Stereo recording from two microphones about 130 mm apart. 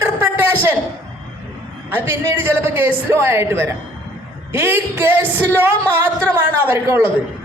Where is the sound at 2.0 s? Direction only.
15° right (ahead or behind).